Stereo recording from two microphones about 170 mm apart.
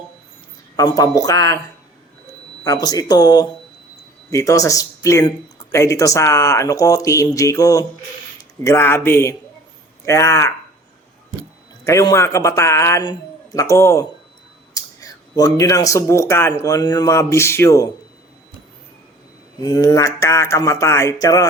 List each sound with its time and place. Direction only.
0.8 s speech: 20° left (ahead or behind)
2.6 s speech: 20° left (ahead or behind)
11.9 s speech: 15° left (ahead or behind)
19.6 s speech: 20° left (ahead or behind)